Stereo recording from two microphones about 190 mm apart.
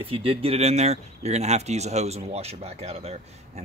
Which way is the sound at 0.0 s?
30° right (ahead or behind).